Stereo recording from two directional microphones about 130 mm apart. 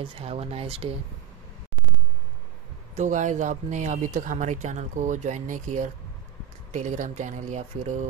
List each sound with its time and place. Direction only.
0.0 s speech: 50° right (ahead or behind)
3.0 s speech: 70° right (ahead or behind)